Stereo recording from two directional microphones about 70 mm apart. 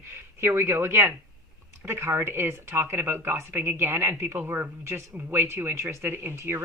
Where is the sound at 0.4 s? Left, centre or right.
Right.